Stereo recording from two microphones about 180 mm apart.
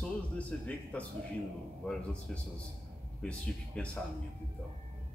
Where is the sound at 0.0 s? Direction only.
5° left (ahead or behind).